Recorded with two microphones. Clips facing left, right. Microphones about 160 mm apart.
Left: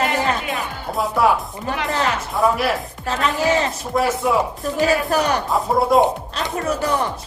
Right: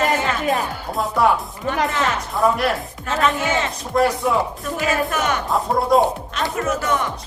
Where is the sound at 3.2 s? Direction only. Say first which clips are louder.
Left 2 dB; 40° left (ahead or behind).